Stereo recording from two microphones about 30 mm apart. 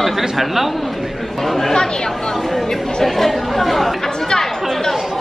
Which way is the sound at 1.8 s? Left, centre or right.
Left.